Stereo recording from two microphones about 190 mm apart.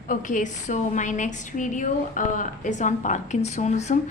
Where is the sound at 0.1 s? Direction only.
45° left (ahead or behind).